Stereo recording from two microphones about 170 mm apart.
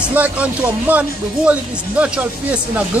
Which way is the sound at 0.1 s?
10° right (ahead or behind).